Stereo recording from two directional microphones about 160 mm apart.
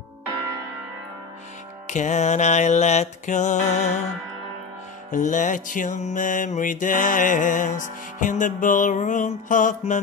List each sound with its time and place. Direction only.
1.9 s music: 50° left (ahead or behind)
5.1 s music: 50° left (ahead or behind)